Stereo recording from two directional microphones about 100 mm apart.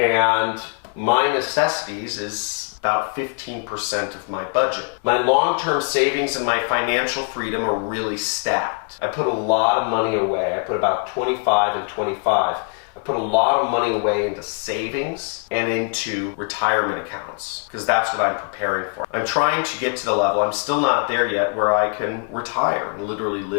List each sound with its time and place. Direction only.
0.0 s a sound: 15° left (ahead or behind)
1.0 s speech: 15° left (ahead or behind)
2.8 s speech: 15° left (ahead or behind)